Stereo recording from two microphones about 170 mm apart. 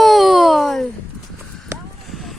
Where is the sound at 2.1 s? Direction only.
Centre (ahead or behind).